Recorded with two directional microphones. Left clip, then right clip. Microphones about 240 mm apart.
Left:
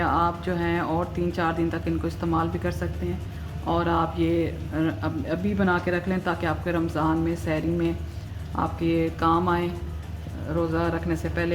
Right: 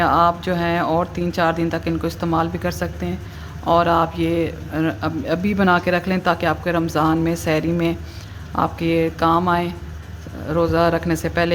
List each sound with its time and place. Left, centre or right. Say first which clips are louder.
0.0 s a man's voice: right 8 dB; right